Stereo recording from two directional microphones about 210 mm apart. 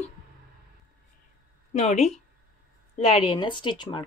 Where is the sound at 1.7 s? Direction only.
30° left (ahead or behind).